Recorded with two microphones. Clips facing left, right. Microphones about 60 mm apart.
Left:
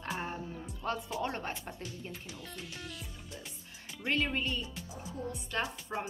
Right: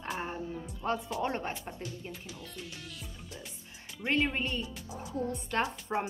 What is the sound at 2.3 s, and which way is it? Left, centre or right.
Speech, centre.